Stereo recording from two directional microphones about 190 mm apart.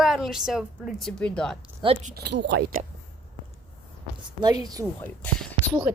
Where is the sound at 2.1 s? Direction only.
60° right (ahead or behind).